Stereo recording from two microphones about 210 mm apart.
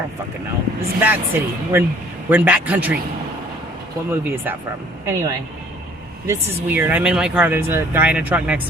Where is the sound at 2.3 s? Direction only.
5° right (ahead or behind).